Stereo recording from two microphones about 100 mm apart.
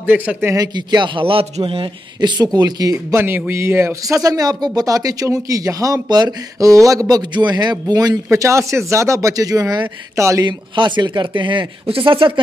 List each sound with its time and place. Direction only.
0.0 s a man's voice: 20° right (ahead or behind)
0.6 s a man's voice: 45° right (ahead or behind); by 1.9 s 65° right (ahead or behind)
2.1 s speech: 45° right (ahead or behind)
3.2 s speech: 20° right (ahead or behind)
10.4 s a man's voice: 45° right (ahead or behind)